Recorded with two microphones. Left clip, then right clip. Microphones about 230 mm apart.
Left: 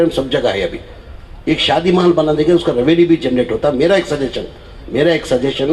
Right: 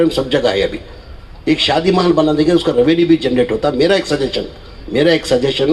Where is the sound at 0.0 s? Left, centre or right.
Right.